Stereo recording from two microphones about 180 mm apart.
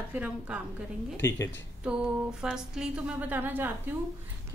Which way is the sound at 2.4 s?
5° right (ahead or behind).